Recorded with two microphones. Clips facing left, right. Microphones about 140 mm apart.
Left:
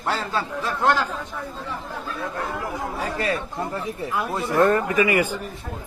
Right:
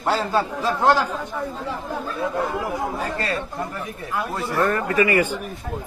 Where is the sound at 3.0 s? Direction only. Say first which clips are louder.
Even; 10° left (ahead or behind).